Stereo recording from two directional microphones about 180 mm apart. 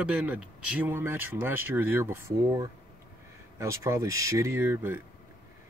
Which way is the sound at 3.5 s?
15° right (ahead or behind).